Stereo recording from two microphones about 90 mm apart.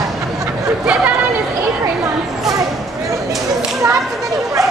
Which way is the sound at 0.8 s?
10° right (ahead or behind).